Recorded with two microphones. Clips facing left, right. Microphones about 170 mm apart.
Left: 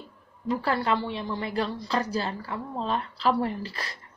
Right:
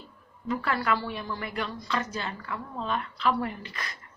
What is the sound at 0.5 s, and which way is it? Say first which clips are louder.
A woman's voice: left 2 dB; 30° left (ahead or behind).